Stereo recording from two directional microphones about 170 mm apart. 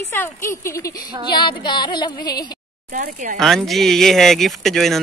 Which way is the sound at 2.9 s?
50° right (ahead or behind).